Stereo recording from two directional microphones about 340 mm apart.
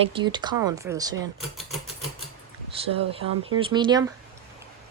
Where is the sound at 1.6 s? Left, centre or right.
Centre.